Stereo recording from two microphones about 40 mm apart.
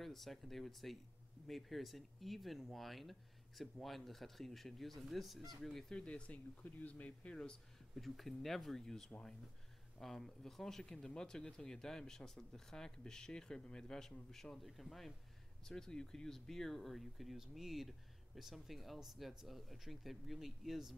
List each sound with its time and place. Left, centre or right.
0.0 s speech: centre
5.9 s speech: left
6.3 s speech: left
7.9 s speech: centre
14.6 s speech: centre
15.6 s speech: centre